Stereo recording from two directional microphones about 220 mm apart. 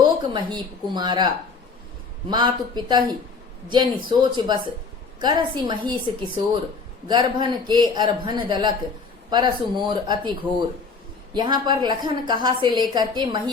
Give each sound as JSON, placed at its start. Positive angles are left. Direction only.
{"t": 0.0, "sound": "a woman's voice", "side_deg": -20}
{"t": 2.3, "sound": "a woman's voice", "side_deg": -20}
{"t": 11.3, "sound": "a woman's voice", "side_deg": -20}